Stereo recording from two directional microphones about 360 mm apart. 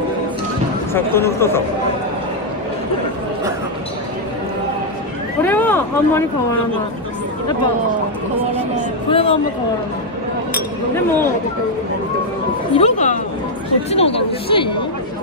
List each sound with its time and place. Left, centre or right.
0.9 s speech: centre
5.4 s speech: centre
9.1 s speech: centre
12.7 s speech: centre